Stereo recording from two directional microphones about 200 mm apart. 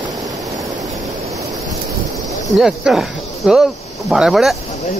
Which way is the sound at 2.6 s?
Centre (ahead or behind).